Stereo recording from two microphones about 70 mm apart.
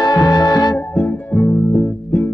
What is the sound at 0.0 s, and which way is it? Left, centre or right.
Music, left.